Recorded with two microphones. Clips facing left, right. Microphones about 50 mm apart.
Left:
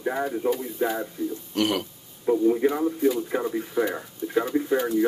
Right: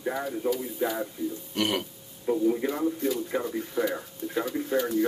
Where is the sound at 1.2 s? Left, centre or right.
Centre.